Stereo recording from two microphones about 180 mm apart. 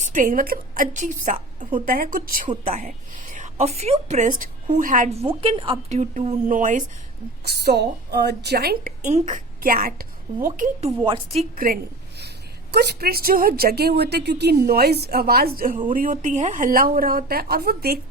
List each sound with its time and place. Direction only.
0.0 s a woman's voice: 45° right (ahead or behind)
5.4 s a woman's voice: 30° right (ahead or behind)
6.0 s a woman's voice: 40° right (ahead or behind)
7.4 s a woman's voice: 65° right (ahead or behind)
9.0 s a woman's voice: 40° right (ahead or behind)
10.8 s a woman's voice: 30° right (ahead or behind)
11.5 s a sound: 55° right (ahead or behind)
12.7 s a woman's voice: 65° right (ahead or behind)